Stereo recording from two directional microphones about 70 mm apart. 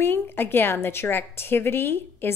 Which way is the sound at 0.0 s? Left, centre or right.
Left.